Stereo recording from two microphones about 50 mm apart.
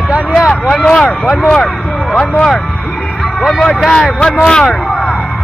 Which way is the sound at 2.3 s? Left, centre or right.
Centre.